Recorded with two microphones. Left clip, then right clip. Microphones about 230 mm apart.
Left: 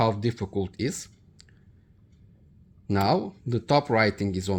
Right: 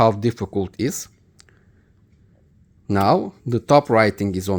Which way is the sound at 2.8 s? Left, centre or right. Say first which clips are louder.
Right 7 dB; right.